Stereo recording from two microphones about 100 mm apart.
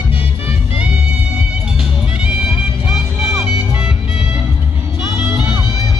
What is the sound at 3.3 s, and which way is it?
Music, 30° right (ahead or behind).